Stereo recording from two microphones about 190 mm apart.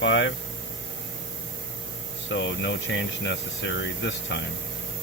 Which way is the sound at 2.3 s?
70° left (ahead or behind).